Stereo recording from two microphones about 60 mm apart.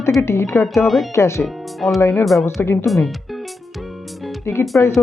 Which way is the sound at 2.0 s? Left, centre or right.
Left.